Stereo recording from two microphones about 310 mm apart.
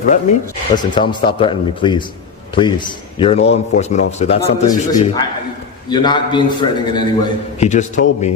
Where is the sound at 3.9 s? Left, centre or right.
Left.